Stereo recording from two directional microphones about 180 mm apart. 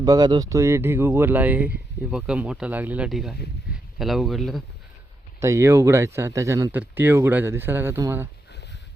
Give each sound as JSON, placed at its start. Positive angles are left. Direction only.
{"t": 0.0, "sound": "speech", "side_deg": -20}
{"t": 5.4, "sound": "speech", "side_deg": -15}